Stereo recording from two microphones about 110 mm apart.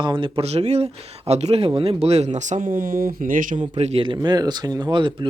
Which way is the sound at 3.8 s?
70° right (ahead or behind).